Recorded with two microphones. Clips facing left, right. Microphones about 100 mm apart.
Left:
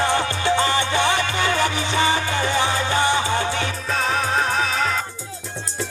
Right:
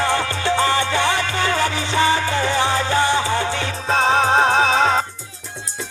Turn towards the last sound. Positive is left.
turn(degrees=-35)  # may be behind; listen again after turning